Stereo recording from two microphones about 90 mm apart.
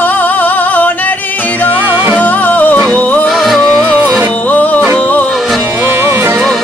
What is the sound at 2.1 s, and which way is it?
Music, 20° left (ahead or behind).